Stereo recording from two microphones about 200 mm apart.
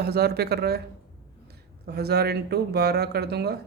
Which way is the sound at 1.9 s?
55° right (ahead or behind).